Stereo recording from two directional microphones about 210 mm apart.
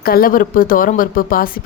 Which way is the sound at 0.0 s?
45° left (ahead or behind).